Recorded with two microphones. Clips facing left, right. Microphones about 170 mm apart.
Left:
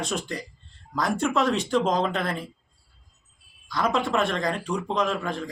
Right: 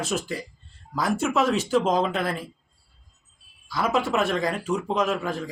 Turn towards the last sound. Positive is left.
turn(degrees=-5)  # may be behind; listen again after turning